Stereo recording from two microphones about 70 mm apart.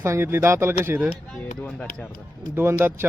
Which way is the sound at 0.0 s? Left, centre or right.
Right.